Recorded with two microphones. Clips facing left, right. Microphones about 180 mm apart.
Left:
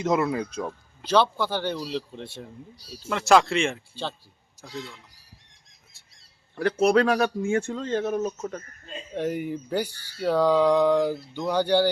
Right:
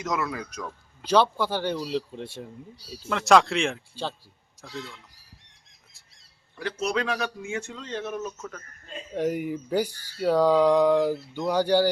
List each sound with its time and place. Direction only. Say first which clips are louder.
0.0 s speech: left 6 dB; 30° left (ahead or behind)
1.0 s a sound: even; 10° right (ahead or behind)
2.9 s speech: even; centre (ahead or behind)
6.6 s speech: left 8 dB; 55° left (ahead or behind); by 8.6 s 35° left (ahead or behind)
9.1 s speech: right 1 dB; 5° right (ahead or behind)
10.2 s a sound: right 1 dB; 5° right (ahead or behind)